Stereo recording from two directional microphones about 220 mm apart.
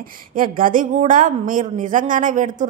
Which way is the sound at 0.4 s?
40° right (ahead or behind).